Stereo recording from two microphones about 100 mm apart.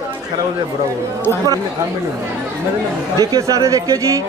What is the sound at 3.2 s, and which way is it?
Speech, 35° right (ahead or behind).